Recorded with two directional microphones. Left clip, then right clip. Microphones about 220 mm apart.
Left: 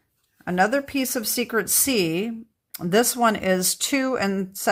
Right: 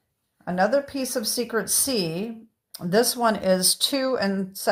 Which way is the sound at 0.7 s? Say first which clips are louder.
Even; 50° left (ahead or behind).